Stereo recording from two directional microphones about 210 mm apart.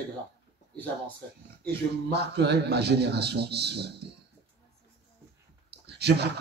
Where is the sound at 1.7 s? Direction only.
50° right (ahead or behind).